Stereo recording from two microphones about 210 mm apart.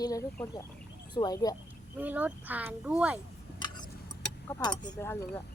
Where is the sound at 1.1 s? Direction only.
20° left (ahead or behind).